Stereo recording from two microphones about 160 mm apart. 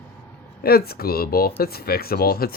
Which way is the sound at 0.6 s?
75° left (ahead or behind).